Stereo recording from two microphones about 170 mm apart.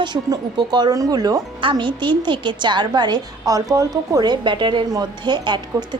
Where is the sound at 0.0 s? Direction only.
25° right (ahead or behind).